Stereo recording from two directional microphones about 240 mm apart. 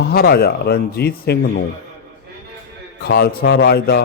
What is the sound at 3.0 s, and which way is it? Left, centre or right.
Speech, left.